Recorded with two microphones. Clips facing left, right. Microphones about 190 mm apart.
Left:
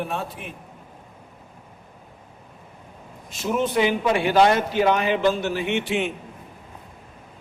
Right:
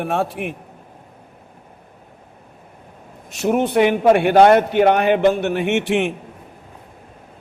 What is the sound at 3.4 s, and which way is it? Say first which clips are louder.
A man's voice: right 6 dB; 65° right (ahead or behind).